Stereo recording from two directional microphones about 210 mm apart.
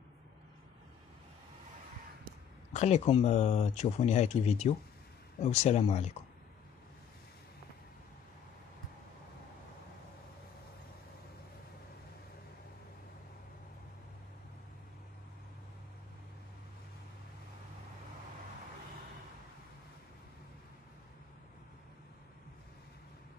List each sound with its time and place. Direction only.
2.7 s speech: 30° left (ahead or behind)